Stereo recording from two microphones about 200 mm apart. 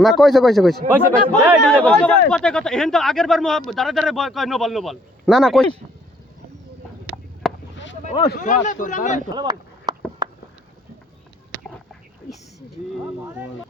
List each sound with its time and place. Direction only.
0.0 s a man's voice: centre (ahead or behind)
7.4 s a sound: centre (ahead or behind)
8.0 s speech: 30° left (ahead or behind)
9.3 s chop: 20° right (ahead or behind)